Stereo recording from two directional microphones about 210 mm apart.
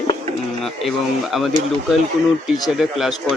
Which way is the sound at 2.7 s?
Centre (ahead or behind).